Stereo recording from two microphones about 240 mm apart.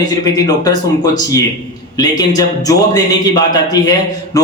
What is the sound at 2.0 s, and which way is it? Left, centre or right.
A man's voice, centre.